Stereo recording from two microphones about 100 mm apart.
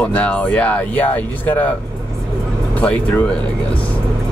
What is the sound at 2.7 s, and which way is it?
Speech, 15° left (ahead or behind).